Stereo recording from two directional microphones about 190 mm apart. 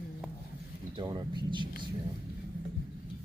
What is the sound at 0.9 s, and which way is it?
Speech, 25° right (ahead or behind).